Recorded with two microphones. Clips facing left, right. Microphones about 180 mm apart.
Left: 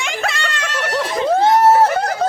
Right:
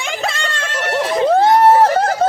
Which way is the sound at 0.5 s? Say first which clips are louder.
Right 1 dB; 30° right (ahead or behind).